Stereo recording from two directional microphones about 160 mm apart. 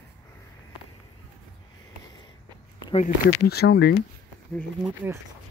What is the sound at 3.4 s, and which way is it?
Speech, 80° left.